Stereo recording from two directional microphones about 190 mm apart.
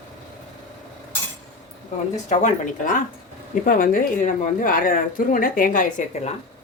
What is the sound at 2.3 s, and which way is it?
Speech, 45° left (ahead or behind).